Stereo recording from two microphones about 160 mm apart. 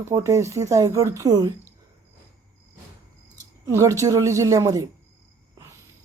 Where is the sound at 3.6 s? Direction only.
20° right (ahead or behind).